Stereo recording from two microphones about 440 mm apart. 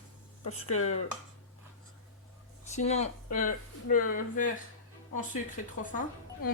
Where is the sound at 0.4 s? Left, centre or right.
Left.